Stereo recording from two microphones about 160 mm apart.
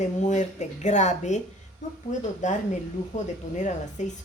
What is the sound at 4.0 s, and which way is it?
Speech, 50° left (ahead or behind).